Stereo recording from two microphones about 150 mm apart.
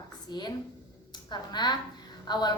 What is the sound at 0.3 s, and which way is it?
A woman's voice, 30° left (ahead or behind).